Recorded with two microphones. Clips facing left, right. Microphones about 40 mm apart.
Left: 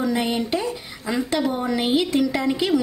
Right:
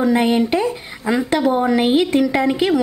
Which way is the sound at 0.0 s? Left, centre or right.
Right.